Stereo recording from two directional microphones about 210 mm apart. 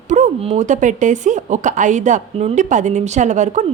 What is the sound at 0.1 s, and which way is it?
Speech, 30° right (ahead or behind).